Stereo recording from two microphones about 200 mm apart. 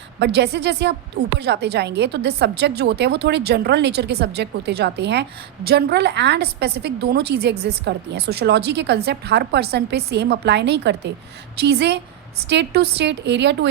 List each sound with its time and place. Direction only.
0.2 s a woman's voice: 55° right (ahead or behind)